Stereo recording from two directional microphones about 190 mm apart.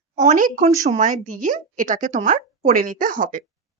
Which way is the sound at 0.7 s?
15° right (ahead or behind).